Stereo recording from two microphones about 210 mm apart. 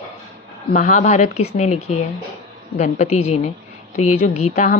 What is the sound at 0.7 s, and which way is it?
A woman's voice, 35° left (ahead or behind).